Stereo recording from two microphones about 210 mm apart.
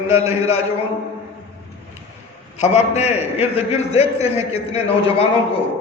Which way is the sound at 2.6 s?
30° left (ahead or behind).